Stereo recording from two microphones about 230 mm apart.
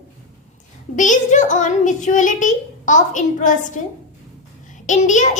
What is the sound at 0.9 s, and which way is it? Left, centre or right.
A child's voice, left.